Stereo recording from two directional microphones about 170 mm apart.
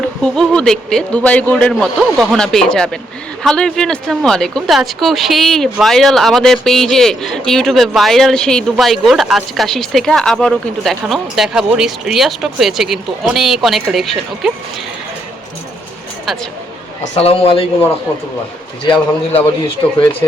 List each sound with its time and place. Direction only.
0.2 s a man's voice: 5° left (ahead or behind)
17.0 s a man's voice: 35° left (ahead or behind)